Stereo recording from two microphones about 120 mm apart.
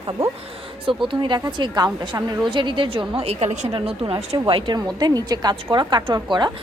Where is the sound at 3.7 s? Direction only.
50° right (ahead or behind).